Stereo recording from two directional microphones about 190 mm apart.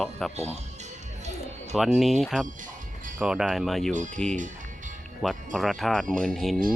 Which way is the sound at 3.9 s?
40° right (ahead or behind).